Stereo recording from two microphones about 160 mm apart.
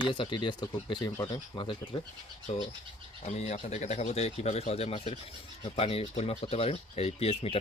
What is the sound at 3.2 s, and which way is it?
Speech, 45° left (ahead or behind).